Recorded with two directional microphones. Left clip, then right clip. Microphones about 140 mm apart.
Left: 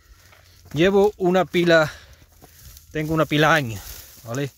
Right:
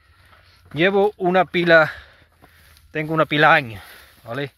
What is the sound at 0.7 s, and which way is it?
Speech, 35° left (ahead or behind).